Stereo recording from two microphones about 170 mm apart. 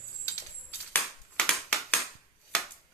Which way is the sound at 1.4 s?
Centre (ahead or behind).